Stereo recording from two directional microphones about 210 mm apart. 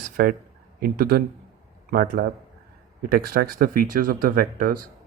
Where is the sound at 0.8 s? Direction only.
45° right (ahead or behind).